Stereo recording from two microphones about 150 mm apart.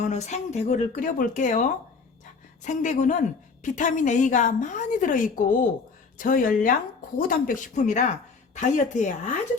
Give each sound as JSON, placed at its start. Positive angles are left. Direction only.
{"t": 0.0, "sound": "speech", "side_deg": 50}
{"t": 2.6, "sound": "a woman's voice", "side_deg": 55}